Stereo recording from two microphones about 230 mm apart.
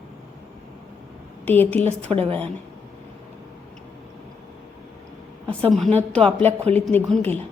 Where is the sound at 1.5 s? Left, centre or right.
Centre.